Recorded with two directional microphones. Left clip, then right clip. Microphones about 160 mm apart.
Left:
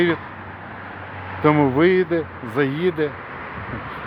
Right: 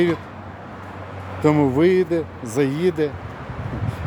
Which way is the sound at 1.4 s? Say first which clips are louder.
Left 1 dB; 10° right (ahead or behind).